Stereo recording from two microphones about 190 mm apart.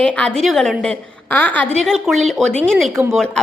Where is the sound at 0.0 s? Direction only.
5° left (ahead or behind).